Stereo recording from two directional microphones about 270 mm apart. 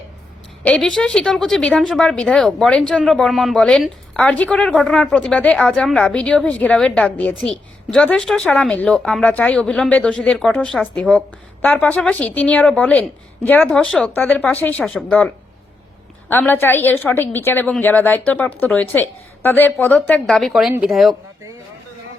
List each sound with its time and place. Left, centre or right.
0.6 s a woman's voice: centre
16.3 s a woman's voice: centre